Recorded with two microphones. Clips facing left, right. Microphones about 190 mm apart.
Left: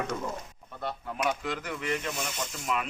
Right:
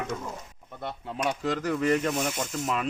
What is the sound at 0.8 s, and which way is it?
Speech, 25° right (ahead or behind).